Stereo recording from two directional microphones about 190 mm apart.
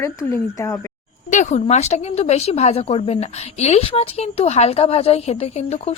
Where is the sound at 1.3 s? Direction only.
40° left (ahead or behind).